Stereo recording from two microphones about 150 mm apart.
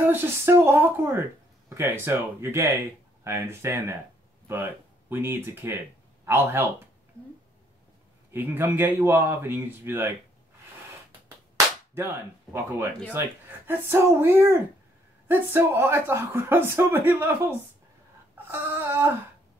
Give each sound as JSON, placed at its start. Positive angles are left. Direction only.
{"t": 0.0, "sound": "speech", "side_deg": -15}
{"t": 8.3, "sound": "speech", "side_deg": -15}
{"t": 11.1, "sound": "a sound", "side_deg": -15}
{"t": 12.5, "sound": "speech", "side_deg": -15}
{"t": 18.5, "sound": "speech", "side_deg": -15}